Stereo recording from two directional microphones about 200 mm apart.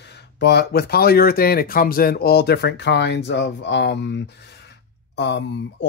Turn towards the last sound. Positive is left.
turn(degrees=60)  # may be behind; listen again after turning